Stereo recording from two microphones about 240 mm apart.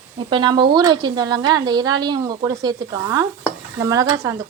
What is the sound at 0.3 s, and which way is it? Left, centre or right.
Speech, centre.